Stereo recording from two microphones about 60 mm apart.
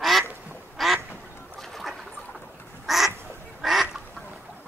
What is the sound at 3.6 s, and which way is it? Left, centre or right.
Duck, centre.